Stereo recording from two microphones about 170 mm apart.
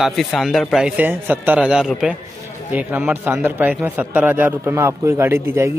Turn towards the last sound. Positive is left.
turn(degrees=-15)  # may be behind; listen again after turning